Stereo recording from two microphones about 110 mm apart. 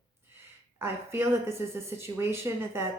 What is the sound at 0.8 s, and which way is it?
A woman's voice, 20° right (ahead or behind).